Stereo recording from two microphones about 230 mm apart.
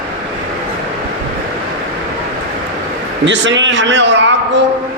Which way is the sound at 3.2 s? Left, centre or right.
Right.